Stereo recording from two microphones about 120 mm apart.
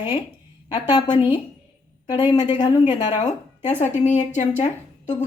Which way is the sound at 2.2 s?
35° left (ahead or behind).